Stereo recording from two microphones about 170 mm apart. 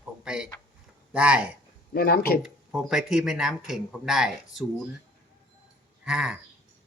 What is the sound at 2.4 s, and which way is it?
Speech, 5° right (ahead or behind).